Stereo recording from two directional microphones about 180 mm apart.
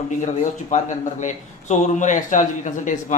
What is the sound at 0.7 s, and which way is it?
Speech, 45° left (ahead or behind).